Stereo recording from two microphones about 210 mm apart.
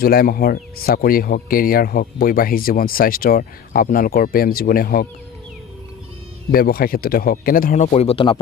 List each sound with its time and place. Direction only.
0.0 s speech: 45° left (ahead or behind)
6.5 s speech: 45° left (ahead or behind); by 8.4 s 25° left (ahead or behind)